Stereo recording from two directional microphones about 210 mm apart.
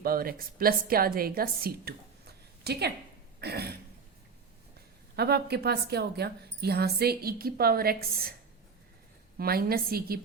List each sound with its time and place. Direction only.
0.0 s a woman's voice: 45° right (ahead or behind)
5.1 s speech: 50° right (ahead or behind)
9.4 s speech: 45° right (ahead or behind)